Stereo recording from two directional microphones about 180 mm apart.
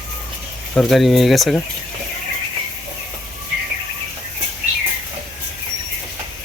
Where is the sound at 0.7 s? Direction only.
Centre (ahead or behind).